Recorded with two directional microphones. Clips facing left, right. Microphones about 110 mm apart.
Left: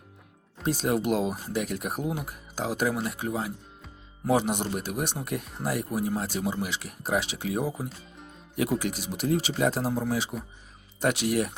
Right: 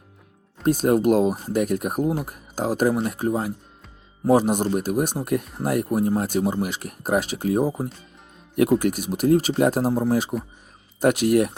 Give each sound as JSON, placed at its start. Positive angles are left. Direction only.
{"t": 0.6, "sound": "speech", "side_deg": -50}